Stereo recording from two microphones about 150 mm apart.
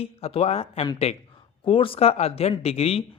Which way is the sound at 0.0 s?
40° left (ahead or behind).